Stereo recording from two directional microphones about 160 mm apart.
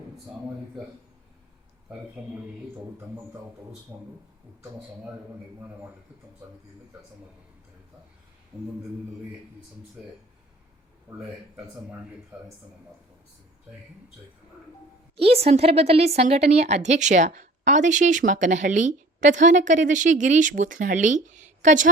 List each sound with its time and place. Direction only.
2.2 s speech: 5° right (ahead or behind)
3.9 s speech: 15° right (ahead or behind)
11.1 s speech: 10° right (ahead or behind)
15.1 s a woman's voice: 40° right (ahead or behind)